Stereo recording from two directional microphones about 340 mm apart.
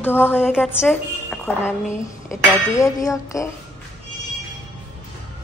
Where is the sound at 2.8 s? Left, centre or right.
Centre.